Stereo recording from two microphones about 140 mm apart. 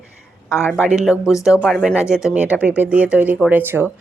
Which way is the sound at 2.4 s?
10° right (ahead or behind).